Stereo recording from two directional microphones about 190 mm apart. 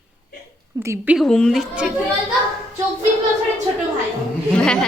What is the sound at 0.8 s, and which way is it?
Speech, 15° right (ahead or behind).